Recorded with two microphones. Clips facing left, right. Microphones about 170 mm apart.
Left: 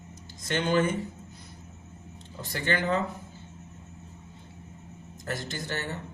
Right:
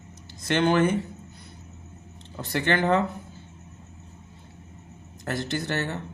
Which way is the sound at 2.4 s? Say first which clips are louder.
Right 5 dB; 65° right (ahead or behind).